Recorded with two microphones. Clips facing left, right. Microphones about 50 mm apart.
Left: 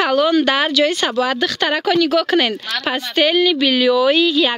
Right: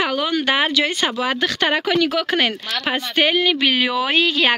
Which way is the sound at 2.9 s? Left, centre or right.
Right.